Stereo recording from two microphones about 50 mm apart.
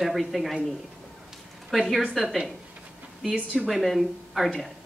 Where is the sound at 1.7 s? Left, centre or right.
Centre.